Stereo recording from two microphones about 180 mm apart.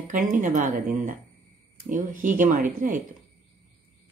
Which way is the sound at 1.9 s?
45° right (ahead or behind).